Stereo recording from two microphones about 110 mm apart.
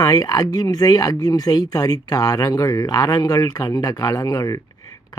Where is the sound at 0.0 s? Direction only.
35° left (ahead or behind).